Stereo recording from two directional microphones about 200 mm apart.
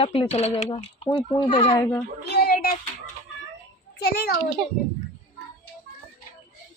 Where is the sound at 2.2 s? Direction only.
50° left (ahead or behind).